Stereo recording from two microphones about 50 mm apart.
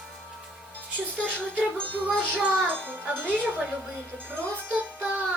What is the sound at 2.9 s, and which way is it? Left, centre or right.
Speech, right.